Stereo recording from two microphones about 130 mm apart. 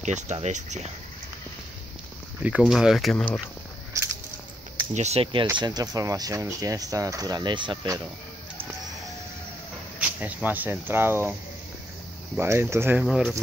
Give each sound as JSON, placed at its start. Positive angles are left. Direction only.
{"t": 0.0, "sound": "speech", "side_deg": -65}
{"t": 2.4, "sound": "speech", "side_deg": -5}
{"t": 3.9, "sound": "a sound", "side_deg": -25}
{"t": 4.9, "sound": "speech", "side_deg": -55}
{"t": 5.6, "sound": "speech", "side_deg": -30}
{"t": 9.9, "sound": "speech", "side_deg": -10}
{"t": 12.4, "sound": "speech", "side_deg": -20}
{"t": 13.0, "sound": "speech", "side_deg": -10}